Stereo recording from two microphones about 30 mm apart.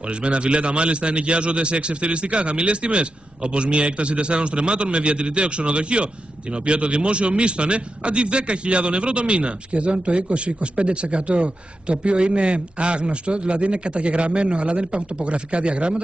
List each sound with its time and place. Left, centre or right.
0.2 s a man's voice: right